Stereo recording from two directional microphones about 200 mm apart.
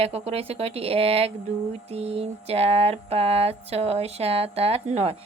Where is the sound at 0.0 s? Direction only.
30° right (ahead or behind).